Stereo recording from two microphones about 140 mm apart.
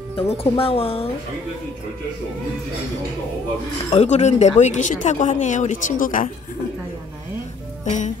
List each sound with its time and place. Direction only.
0.1 s speech: 45° left (ahead or behind)
3.9 s speech: 55° left (ahead or behind); by 6.3 s 70° left (ahead or behind)
7.8 s speech: 60° left (ahead or behind)